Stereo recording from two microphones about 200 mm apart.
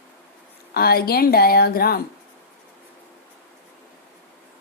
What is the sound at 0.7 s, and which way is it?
Speech, 50° left (ahead or behind).